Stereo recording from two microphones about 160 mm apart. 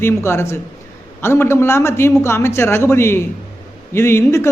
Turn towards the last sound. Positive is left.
turn(degrees=15)  # may be behind; listen again after turning